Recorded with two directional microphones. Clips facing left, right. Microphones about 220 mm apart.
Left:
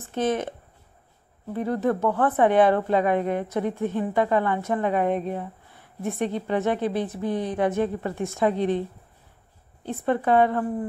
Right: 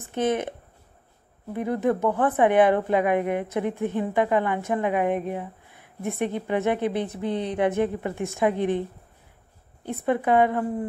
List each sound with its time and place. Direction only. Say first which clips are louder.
0.1 s a woman's voice: even; 15° right (ahead or behind)
9.8 s a woman's voice: even; 15° right (ahead or behind)